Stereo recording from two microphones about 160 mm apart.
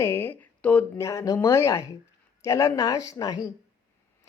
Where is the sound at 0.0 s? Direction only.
15° left (ahead or behind).